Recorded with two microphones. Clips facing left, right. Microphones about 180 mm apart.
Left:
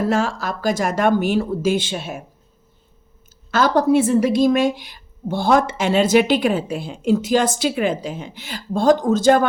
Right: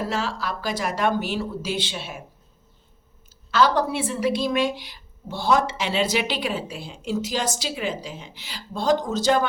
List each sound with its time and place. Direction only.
0.1 s a woman's voice: 50° left (ahead or behind)
3.5 s a woman's voice: 45° left (ahead or behind)